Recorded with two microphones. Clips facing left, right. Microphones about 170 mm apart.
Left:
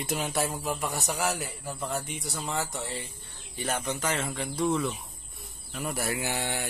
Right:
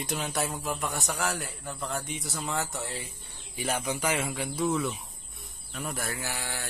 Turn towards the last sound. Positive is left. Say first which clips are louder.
# left 5 dB
turn(degrees=20)  # may be behind; listen again after turning